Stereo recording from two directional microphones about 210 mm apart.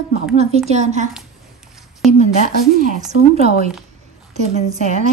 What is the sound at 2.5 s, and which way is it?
A woman's voice, 40° right (ahead or behind).